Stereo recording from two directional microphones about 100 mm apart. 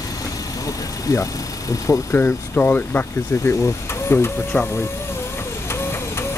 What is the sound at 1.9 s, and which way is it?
Speech, 25° left (ahead or behind).